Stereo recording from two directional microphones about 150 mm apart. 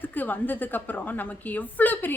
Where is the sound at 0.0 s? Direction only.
10° left (ahead or behind).